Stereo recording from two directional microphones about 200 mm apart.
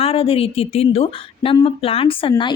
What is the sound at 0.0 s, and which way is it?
A woman's voice, 30° left (ahead or behind).